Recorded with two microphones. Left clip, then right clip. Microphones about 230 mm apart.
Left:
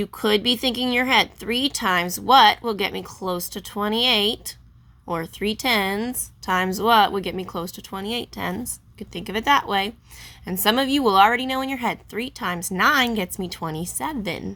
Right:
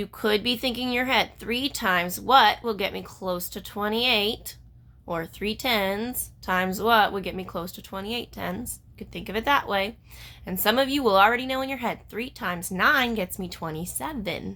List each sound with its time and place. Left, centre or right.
0.0 s a woman's voice: left